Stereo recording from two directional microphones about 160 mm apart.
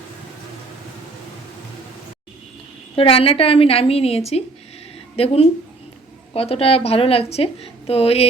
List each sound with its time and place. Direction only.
2.9 s a woman's voice: 35° left (ahead or behind)